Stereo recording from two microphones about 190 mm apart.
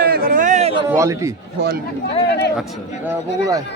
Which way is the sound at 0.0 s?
50° right (ahead or behind).